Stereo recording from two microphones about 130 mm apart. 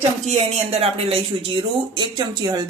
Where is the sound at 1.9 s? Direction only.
35° right (ahead or behind).